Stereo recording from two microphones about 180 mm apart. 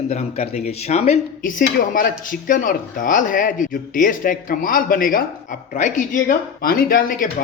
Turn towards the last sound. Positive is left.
turn(degrees=50)  # may be behind; listen again after turning